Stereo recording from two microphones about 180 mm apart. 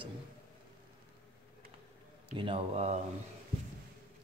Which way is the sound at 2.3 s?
30° right (ahead or behind).